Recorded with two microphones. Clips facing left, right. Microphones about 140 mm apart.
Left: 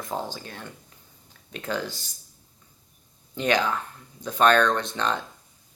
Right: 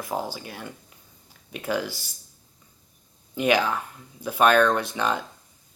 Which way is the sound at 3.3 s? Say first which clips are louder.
Right 2 dB; 10° right (ahead or behind).